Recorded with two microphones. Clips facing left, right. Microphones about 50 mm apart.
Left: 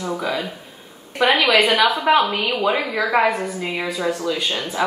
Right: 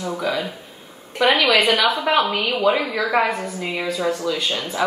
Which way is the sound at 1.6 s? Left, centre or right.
Left.